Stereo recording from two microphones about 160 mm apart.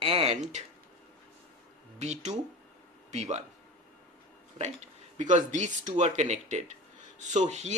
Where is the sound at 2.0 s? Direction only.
45° right (ahead or behind).